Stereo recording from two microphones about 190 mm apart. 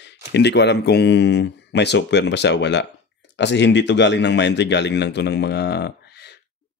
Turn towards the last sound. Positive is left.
turn(degrees=60)  # may be behind; listen again after turning